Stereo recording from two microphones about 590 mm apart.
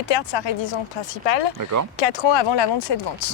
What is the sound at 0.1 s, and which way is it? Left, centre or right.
Speech, left.